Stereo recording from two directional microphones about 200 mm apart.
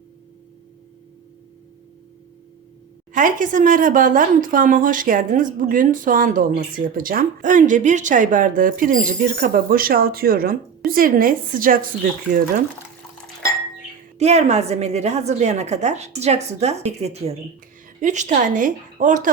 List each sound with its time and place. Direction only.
3.1 s a woman's voice: 40° right (ahead or behind)
14.2 s speech: 35° right (ahead or behind)